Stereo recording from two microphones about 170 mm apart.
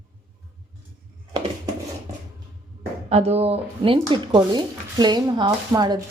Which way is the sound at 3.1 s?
40° right (ahead or behind).